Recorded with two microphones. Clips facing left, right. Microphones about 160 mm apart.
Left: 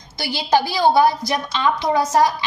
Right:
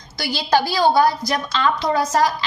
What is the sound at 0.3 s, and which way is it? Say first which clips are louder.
A woman's voice: even; 15° left (ahead or behind).